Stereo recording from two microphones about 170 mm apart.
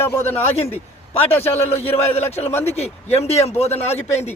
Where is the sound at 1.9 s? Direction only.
40° left (ahead or behind).